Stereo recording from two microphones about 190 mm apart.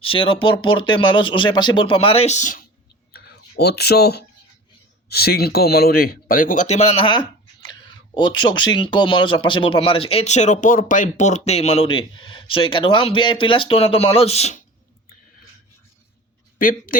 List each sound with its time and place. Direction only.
0.0 s speech: 25° left (ahead or behind)
3.6 s speech: 60° left (ahead or behind); by 14.6 s 35° left (ahead or behind)
16.6 s speech: 45° left (ahead or behind)